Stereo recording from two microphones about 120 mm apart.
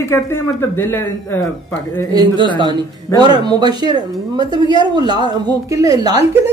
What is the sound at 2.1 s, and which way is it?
A woman's voice, 40° right (ahead or behind).